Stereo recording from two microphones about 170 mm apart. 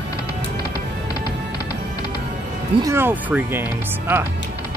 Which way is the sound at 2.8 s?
15° right (ahead or behind).